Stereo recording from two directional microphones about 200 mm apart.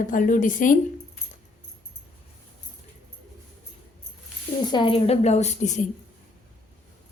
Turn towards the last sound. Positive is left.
turn(degrees=35)  # may be behind; listen again after turning